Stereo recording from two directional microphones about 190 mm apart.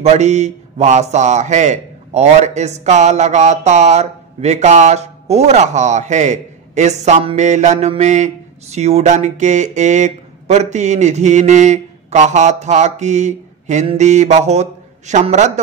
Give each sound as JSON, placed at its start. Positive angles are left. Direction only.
{"t": 0.0, "sound": "a man's voice", "side_deg": -35}